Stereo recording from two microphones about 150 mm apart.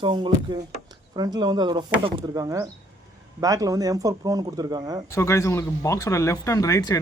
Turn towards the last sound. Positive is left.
turn(degrees=25)  # may be behind; listen again after turning